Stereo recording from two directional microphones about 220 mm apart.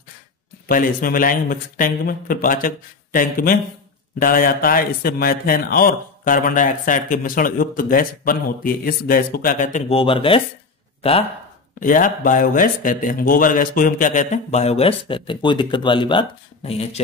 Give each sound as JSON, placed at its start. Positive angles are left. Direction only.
{"t": 0.7, "sound": "speech", "side_deg": 40}
{"t": 11.8, "sound": "speech", "side_deg": 40}